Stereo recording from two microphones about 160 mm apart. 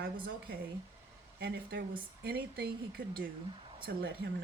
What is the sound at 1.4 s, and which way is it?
Speech, 80° right.